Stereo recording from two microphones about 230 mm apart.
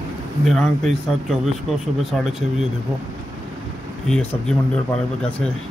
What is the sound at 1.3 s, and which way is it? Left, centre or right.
Speech, centre.